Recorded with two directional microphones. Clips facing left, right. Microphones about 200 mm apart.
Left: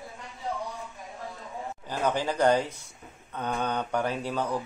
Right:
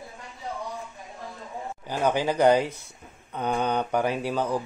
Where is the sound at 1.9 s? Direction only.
10° right (ahead or behind).